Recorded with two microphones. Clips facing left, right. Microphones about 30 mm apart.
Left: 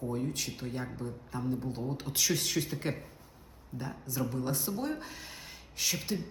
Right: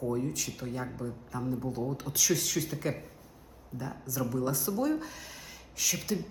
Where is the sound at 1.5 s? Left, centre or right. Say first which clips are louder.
Right 2 dB; left.